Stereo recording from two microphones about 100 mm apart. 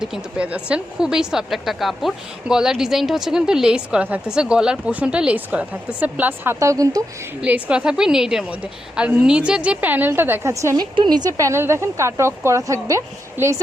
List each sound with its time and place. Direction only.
0.0 s speech: 10° right (ahead or behind); by 7.0 s 35° right (ahead or behind)
7.4 s speech: 10° right (ahead or behind); by 10.8 s 30° right (ahead or behind)
10.8 s a woman's voice: 50° right (ahead or behind)
11.3 s speech: 30° right (ahead or behind)